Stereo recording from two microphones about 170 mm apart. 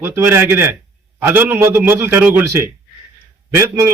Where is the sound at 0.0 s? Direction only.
15° right (ahead or behind).